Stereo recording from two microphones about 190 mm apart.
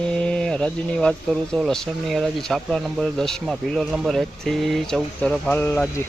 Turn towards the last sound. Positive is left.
turn(degrees=10)  # may be behind; listen again after turning